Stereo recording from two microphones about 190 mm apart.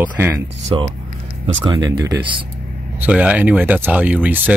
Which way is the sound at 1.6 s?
20° right (ahead or behind).